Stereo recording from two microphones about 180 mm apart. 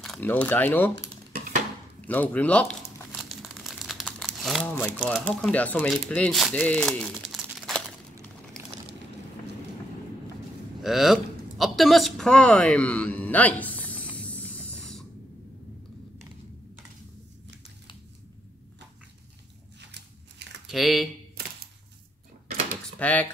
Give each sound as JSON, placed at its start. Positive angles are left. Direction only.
{"t": 0.0, "sound": "speech", "side_deg": 5}
{"t": 3.2, "sound": "crumpling", "side_deg": 0}
{"t": 5.0, "sound": "speech", "side_deg": 0}
{"t": 10.8, "sound": "a sound", "side_deg": 0}
{"t": 14.1, "sound": "hiss", "side_deg": 10}
{"t": 19.9, "sound": "scissors", "side_deg": -75}
{"t": 20.6, "sound": "speech", "side_deg": 0}
{"t": 22.9, "sound": "speech", "side_deg": 10}